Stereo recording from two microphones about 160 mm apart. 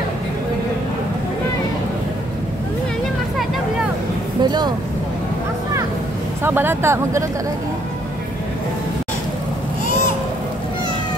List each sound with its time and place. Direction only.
4.4 s speech: 25° right (ahead or behind)
6.4 s speech: 15° right (ahead or behind)